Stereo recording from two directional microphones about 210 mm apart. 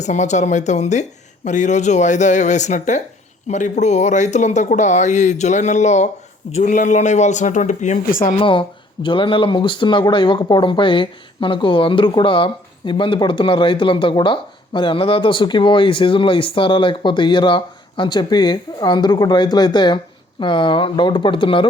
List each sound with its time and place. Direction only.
0.0 s speech: 35° left (ahead or behind)
8.4 s speech: 25° left (ahead or behind)